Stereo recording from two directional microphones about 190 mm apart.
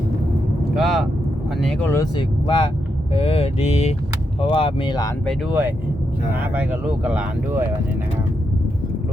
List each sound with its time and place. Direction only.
0.8 s speech: centre (ahead or behind)
2.1 s speech: 25° left (ahead or behind)
3.1 s vehicle: 30° left (ahead or behind)
4.4 s speech: 30° left (ahead or behind)
5.5 s speech: 10° right (ahead or behind)